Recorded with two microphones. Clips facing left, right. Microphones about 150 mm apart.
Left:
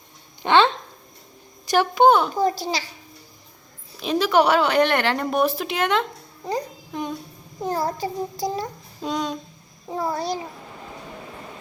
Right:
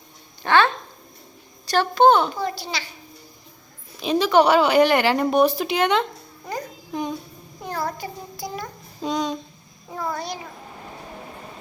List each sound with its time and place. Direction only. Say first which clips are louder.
0.4 s speech: left 1 dB; 20° left (ahead or behind)
1.7 s a woman's voice: even; 15° left (ahead or behind)
2.3 s a child's voice: left 5 dB; 40° left (ahead or behind)
4.0 s a woman's voice: right 2 dB; centre (ahead or behind)
6.4 s babbling: left 4 dB; 20° left (ahead or behind)
6.9 s a woman's voice: right 2 dB; centre (ahead or behind)
7.6 s a child's voice: left 4 dB; 35° left (ahead or behind)
9.0 s speech: right 2 dB; centre (ahead or behind)
9.9 s a child's voice: left 4 dB; 30° left (ahead or behind)